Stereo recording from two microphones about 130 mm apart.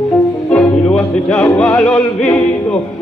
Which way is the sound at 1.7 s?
10° left (ahead or behind).